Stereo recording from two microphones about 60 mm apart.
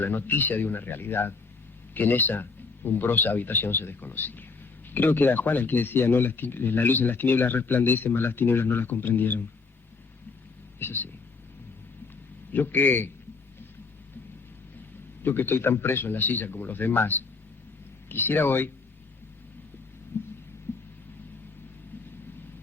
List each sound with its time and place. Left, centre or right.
0.0 s speech: left
10.8 s speech: left
12.5 s speech: left
15.2 s speech: left
20.7 s heart sounds: left